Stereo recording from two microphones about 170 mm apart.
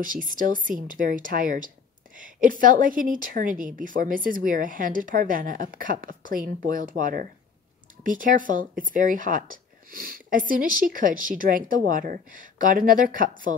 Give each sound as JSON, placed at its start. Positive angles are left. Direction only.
{"t": 0.0, "sound": "a woman's voice", "side_deg": -50}